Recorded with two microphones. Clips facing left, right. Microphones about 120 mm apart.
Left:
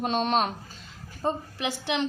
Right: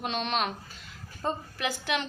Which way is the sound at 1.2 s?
25° left (ahead or behind).